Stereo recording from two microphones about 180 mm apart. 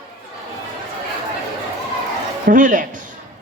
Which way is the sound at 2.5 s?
45° right (ahead or behind).